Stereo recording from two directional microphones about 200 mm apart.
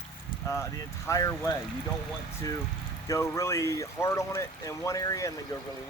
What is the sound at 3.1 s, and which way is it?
Speech, 15° left (ahead or behind).